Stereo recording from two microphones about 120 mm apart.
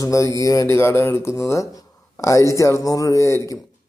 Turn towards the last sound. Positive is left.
turn(degrees=25)  # may be behind; listen again after turning